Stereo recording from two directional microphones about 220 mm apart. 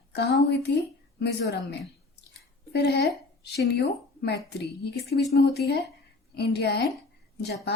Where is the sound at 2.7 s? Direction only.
50° left (ahead or behind).